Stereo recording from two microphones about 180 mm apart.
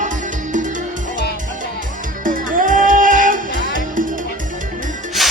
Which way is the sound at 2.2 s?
50° right (ahead or behind).